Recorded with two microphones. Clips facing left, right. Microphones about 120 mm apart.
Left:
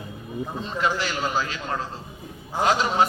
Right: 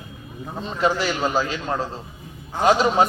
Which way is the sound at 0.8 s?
20° right (ahead or behind).